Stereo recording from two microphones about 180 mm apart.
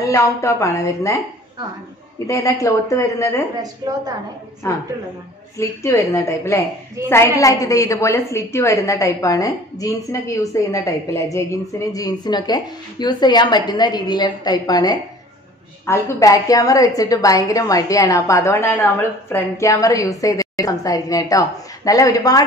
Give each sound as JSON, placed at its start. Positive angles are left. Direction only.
{"t": 0.0, "sound": "a woman's voice", "side_deg": 15}
{"t": 2.2, "sound": "a woman's voice", "side_deg": 20}
{"t": 4.6, "sound": "a woman's voice", "side_deg": 15}